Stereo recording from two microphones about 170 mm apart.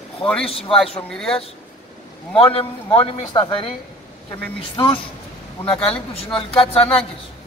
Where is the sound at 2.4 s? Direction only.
35° left (ahead or behind).